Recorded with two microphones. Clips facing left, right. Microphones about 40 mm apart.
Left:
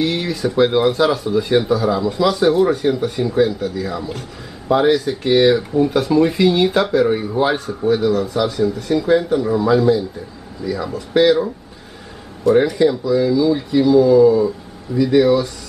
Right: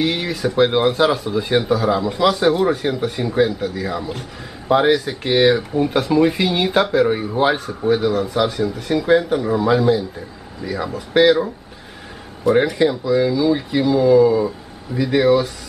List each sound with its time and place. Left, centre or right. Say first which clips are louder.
0.0 s speech: left 1 dB; centre
0.7 s speech: left 1 dB; right
1.9 s speech: even; centre
9.8 s speech: left 2 dB; centre
12.7 s speech: left 1 dB; centre